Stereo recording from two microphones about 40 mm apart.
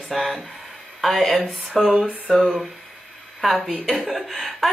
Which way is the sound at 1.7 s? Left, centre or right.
Centre.